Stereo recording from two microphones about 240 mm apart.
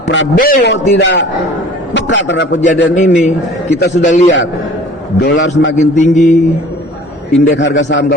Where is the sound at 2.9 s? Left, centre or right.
Left.